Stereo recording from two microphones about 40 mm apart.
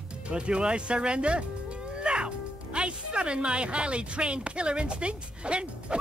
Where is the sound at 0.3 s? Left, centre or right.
Right.